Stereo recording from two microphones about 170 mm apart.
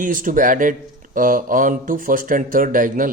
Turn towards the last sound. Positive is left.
turn(degrees=-50)  # may be behind; listen again after turning